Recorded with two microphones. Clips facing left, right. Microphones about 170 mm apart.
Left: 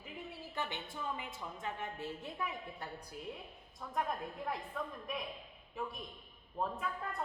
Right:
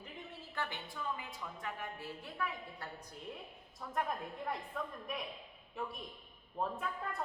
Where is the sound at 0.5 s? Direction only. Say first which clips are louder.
Even; 20° left (ahead or behind).